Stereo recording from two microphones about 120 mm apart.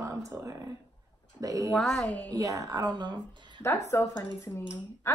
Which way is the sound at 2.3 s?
30° right (ahead or behind).